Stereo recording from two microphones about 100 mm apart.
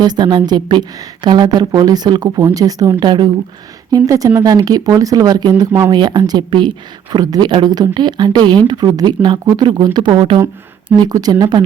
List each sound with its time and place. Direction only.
0.0 s a woman's voice: 45° right (ahead or behind)
3.9 s a woman's voice: 35° right (ahead or behind)